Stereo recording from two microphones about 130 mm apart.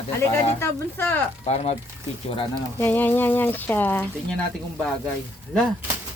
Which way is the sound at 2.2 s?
45° left (ahead or behind).